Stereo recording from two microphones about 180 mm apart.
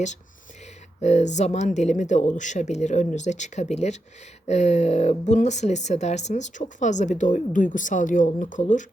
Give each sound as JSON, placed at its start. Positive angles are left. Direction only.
{"t": 1.0, "sound": "speech", "side_deg": 40}